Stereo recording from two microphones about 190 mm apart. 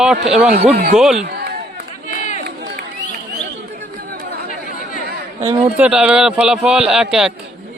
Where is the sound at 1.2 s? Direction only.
55° right (ahead or behind).